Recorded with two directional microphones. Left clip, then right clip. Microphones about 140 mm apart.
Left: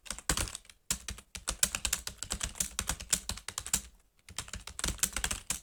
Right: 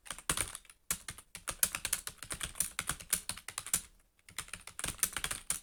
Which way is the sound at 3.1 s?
10° left (ahead or behind).